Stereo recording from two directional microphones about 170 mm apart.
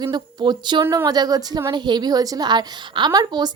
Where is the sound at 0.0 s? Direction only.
25° right (ahead or behind).